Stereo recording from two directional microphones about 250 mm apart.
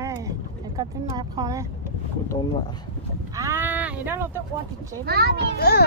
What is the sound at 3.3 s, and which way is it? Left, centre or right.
Sheep, centre.